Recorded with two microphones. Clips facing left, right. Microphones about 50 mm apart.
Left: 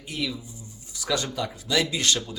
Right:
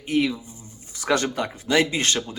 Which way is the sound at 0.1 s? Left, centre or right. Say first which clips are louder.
Right 9 dB; right.